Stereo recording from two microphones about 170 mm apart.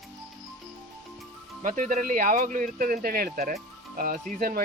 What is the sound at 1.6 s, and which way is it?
Speech, 50° right (ahead or behind).